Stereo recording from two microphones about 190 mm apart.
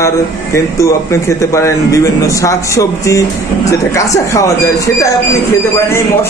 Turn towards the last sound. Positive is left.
turn(degrees=15)  # may be behind; listen again after turning